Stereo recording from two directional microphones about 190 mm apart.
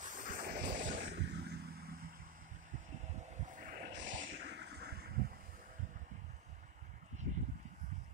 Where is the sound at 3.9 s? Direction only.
75° right (ahead or behind); by 5.4 s 55° right (ahead or behind).